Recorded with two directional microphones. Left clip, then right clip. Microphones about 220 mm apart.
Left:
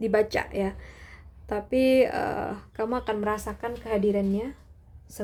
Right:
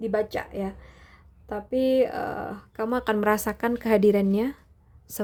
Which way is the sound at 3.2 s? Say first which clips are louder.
Right 5 dB; 40° right (ahead or behind).